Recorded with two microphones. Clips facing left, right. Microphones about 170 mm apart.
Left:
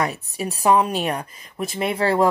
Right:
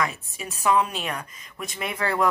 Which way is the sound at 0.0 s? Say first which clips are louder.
Left 4 dB; 35° left (ahead or behind).